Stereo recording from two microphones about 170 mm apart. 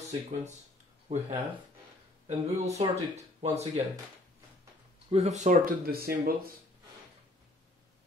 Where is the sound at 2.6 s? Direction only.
40° right (ahead or behind).